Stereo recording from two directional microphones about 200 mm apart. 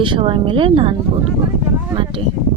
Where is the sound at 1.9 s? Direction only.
25° right (ahead or behind).